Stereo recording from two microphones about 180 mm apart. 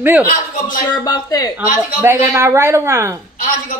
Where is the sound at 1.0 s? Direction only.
20° left (ahead or behind).